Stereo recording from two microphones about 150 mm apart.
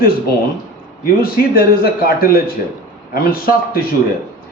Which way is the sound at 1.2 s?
85° left.